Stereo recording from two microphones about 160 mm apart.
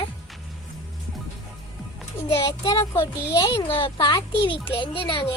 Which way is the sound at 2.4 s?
20° left (ahead or behind).